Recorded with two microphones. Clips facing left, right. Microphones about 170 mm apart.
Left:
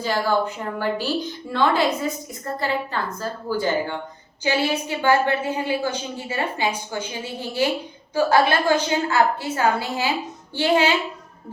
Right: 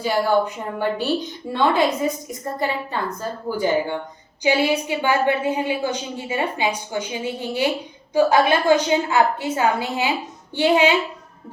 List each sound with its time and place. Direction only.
0.0 s a woman's voice: 15° right (ahead or behind)